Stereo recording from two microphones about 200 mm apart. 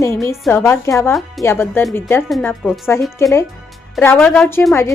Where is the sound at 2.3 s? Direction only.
Centre (ahead or behind).